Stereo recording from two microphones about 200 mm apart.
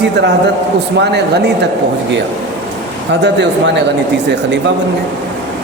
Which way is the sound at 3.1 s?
60° right (ahead or behind).